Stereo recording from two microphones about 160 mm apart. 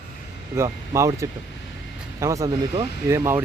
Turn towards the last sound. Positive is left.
turn(degrees=-15)  # may be behind; listen again after turning